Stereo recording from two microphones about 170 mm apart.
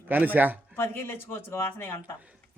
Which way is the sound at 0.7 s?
15° left (ahead or behind).